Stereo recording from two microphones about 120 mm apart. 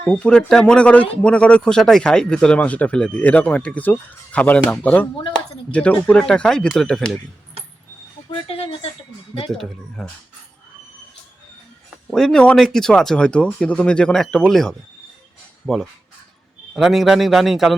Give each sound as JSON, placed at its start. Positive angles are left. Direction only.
{"t": 0.1, "sound": "speech", "side_deg": 10}
{"t": 8.3, "sound": "a sound", "side_deg": 55}
{"t": 9.5, "sound": "speech", "side_deg": 5}
{"t": 12.1, "sound": "speech", "side_deg": 5}